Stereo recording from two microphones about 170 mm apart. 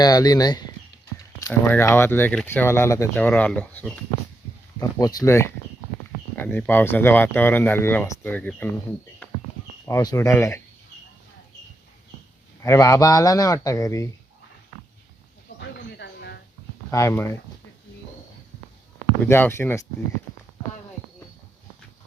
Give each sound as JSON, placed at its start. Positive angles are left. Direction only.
{"t": 0.0, "sound": "a man's voice", "side_deg": 20}
{"t": 1.4, "sound": "speech", "side_deg": 15}
{"t": 4.8, "sound": "a man's voice", "side_deg": 20}
{"t": 9.8, "sound": "speech", "side_deg": 20}
{"t": 12.6, "sound": "a man's voice", "side_deg": 20}
{"t": 15.6, "sound": "music", "side_deg": 80}
{"t": 16.9, "sound": "speech", "side_deg": 15}
{"t": 19.2, "sound": "speech", "side_deg": 15}